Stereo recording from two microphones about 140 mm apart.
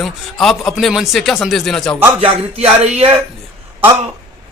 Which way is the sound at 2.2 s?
45° right (ahead or behind).